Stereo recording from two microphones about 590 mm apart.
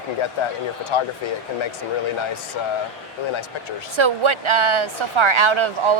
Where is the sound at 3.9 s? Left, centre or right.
Right.